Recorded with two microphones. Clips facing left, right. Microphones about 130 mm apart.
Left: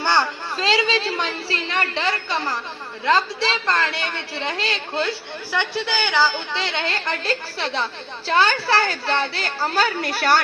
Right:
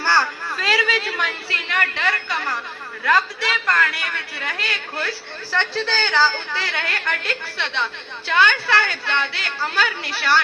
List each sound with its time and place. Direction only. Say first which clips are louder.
0.0 s a woman's voice: even; 20° left (ahead or behind); by 10.4 s 45° left (ahead or behind)